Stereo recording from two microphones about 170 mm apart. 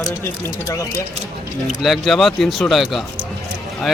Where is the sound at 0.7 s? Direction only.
20° left (ahead or behind).